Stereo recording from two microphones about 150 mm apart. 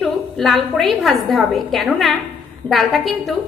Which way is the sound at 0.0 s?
Centre (ahead or behind).